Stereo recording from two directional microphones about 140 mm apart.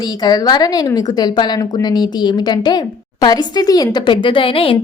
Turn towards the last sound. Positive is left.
turn(degrees=40)  # may be behind; listen again after turning